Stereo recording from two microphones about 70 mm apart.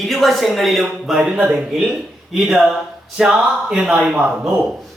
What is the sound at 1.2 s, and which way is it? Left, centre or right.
Speech, centre.